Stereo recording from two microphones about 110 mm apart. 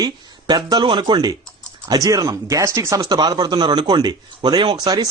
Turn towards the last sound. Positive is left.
turn(degrees=-40)  # may be behind; listen again after turning